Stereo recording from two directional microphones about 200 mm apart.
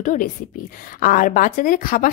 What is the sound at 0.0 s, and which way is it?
A woman's voice, 40° left (ahead or behind).